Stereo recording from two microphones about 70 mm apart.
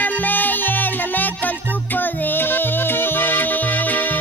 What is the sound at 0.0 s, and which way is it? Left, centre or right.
Music, left.